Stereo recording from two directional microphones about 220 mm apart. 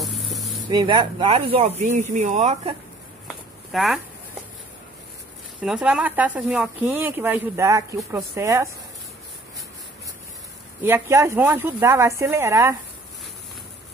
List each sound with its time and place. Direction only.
0.0 s vehicle: centre (ahead or behind)
0.7 s speech: 20° right (ahead or behind)
3.7 s speech: centre (ahead or behind)
5.6 s speech: 5° right (ahead or behind)
10.8 s speech: 10° right (ahead or behind)